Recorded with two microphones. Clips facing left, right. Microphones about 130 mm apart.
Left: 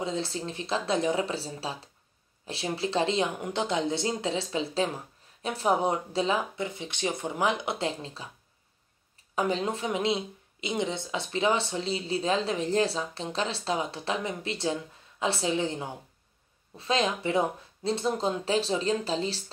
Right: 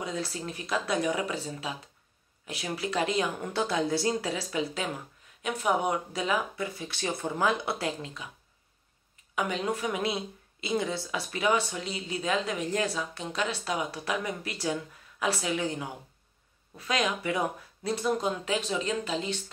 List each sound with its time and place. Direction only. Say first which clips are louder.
0.0 s speech: left 3 dB; 25° left (ahead or behind)
8.0 s speech: even; 30° left (ahead or behind)
9.3 s speech: left 2 dB; 35° left (ahead or behind)